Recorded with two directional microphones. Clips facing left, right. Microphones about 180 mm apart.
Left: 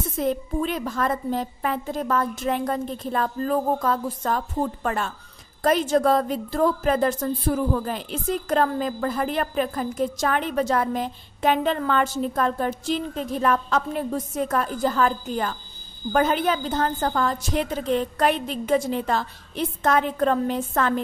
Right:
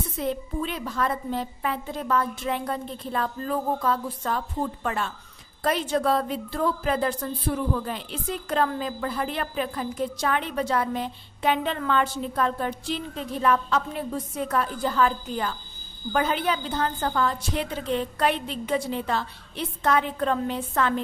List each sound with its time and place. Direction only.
0.2 s a woman's voice: 45° left (ahead or behind)